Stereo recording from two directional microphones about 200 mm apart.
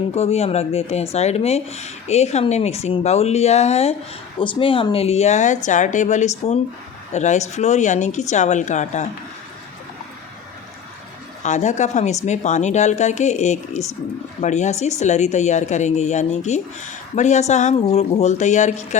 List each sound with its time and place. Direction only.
0.1 s speech: 30° left (ahead or behind)
11.4 s speech: 35° left (ahead or behind)